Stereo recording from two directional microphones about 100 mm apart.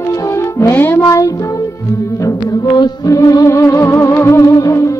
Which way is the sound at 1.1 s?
35° left (ahead or behind).